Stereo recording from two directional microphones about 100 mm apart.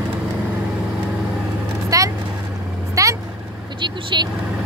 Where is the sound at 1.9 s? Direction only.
35° right (ahead or behind).